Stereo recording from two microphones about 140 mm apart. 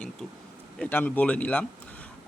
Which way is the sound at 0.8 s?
10° left (ahead or behind).